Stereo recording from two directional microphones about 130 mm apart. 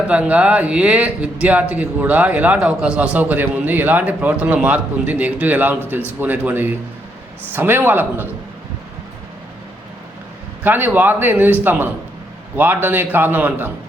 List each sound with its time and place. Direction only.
0.1 s a man's voice: 10° right (ahead or behind)
10.6 s a man's voice: 15° right (ahead or behind)